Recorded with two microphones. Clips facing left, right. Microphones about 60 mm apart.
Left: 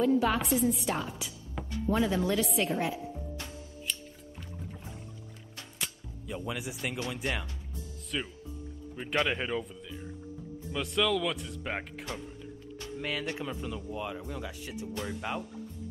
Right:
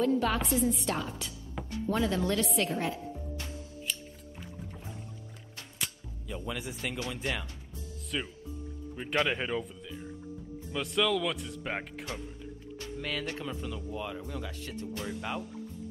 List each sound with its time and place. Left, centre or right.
0.0 s speech: centre
6.2 s speech: centre
8.1 s speech: centre
13.0 s speech: centre